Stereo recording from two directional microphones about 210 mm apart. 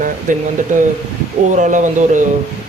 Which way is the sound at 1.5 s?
35° right (ahead or behind).